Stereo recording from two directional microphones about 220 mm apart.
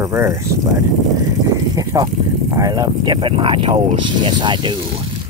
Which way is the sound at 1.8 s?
15° right (ahead or behind).